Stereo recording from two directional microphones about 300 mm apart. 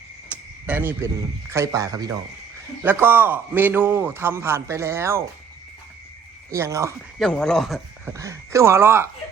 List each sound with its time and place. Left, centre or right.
0.3 s a man's voice: centre
6.5 s a man's voice: centre
7.2 s a man's voice: centre